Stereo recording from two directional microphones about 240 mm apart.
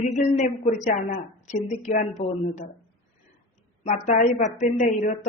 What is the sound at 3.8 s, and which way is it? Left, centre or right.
Speech, left.